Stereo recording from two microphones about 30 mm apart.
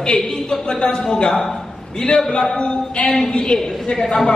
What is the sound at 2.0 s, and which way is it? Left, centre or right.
A man's voice, left.